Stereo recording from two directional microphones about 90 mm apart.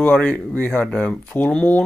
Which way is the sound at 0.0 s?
20° left (ahead or behind).